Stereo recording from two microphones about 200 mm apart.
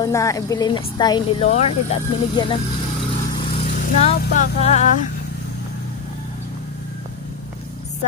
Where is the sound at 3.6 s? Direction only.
30° left (ahead or behind).